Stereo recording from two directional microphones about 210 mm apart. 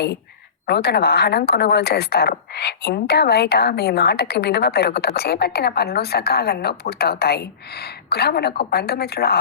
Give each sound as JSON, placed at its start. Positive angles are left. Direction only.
{"t": 0.7, "sound": "a woman's voice", "side_deg": 50}